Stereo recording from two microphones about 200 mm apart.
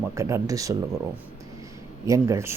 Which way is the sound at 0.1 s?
15° right (ahead or behind).